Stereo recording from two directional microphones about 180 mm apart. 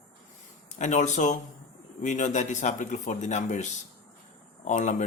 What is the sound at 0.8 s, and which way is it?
Speech, 40° left (ahead or behind).